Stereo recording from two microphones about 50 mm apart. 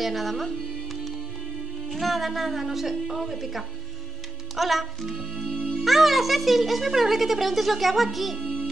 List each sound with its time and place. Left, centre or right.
0.0 s speech: centre
1.9 s speech: centre
5.6 s music: centre
5.9 s speech: centre